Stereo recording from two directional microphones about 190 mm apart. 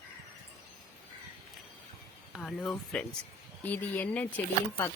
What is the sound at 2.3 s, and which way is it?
Speech, centre (ahead or behind).